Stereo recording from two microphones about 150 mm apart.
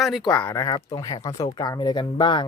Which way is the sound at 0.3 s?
30° left (ahead or behind).